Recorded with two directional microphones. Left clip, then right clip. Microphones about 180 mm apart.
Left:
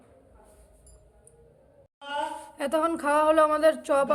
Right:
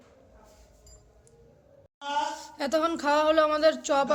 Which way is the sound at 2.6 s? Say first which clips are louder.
Left 1 dB; 5° left (ahead or behind).